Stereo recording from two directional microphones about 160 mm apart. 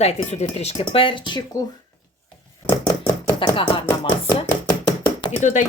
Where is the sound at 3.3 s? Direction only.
30° left (ahead or behind).